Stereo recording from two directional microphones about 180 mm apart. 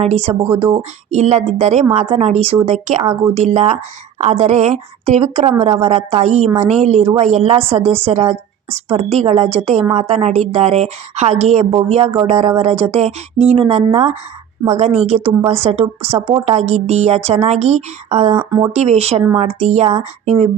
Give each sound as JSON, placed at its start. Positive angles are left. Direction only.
{"t": 0.0, "sound": "a woman's voice", "side_deg": -35}
{"t": 18.3, "sound": "speech", "side_deg": -20}
{"t": 18.7, "sound": "a woman's voice", "side_deg": -35}